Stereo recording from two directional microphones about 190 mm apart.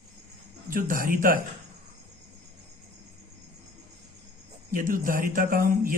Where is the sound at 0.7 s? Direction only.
45° right (ahead or behind).